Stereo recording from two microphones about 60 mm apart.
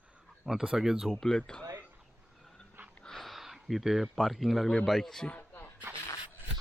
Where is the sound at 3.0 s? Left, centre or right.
Centre.